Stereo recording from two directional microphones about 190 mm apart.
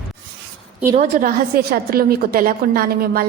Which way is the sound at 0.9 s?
40° right (ahead or behind).